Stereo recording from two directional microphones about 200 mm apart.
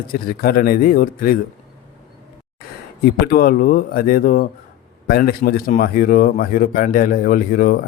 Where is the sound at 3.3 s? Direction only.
45° left (ahead or behind).